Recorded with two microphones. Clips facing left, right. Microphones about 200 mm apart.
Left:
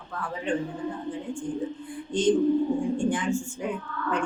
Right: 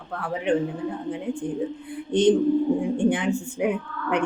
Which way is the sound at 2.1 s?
60° right (ahead or behind).